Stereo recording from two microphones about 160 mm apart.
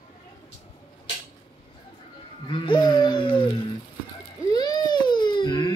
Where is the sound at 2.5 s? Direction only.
30° left (ahead or behind).